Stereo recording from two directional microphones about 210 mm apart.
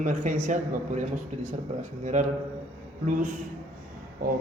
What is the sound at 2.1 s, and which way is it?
Speech, 35° right (ahead or behind).